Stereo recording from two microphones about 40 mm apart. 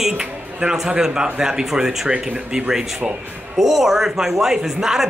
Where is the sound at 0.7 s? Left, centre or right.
Centre.